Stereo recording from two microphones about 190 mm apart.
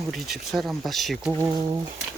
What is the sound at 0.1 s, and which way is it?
Speech, centre (ahead or behind).